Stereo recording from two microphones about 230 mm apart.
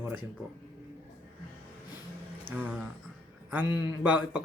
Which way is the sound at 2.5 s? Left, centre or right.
Centre.